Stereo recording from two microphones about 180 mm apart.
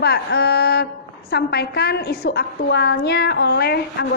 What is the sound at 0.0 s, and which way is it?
A woman's voice, 65° left (ahead or behind).